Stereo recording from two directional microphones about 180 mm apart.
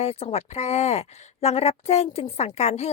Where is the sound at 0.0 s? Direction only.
35° left (ahead or behind).